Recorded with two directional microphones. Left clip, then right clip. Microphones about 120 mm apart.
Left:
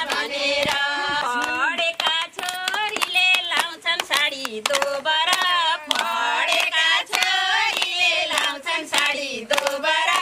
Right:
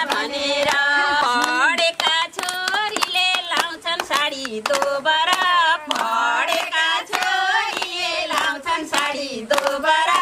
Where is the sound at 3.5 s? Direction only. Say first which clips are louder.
Even; centre (ahead or behind).